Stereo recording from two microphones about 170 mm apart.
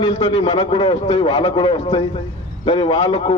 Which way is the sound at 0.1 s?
35° left (ahead or behind).